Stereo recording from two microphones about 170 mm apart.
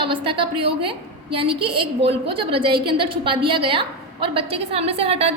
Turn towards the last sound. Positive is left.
turn(degrees=-35)  # may be behind; listen again after turning